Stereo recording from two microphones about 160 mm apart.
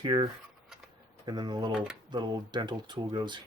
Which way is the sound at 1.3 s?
25° right (ahead or behind).